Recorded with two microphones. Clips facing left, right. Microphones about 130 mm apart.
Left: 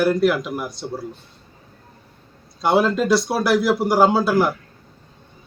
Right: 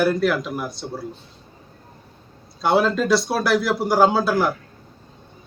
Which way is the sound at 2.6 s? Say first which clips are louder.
Left 1 dB; centre (ahead or behind).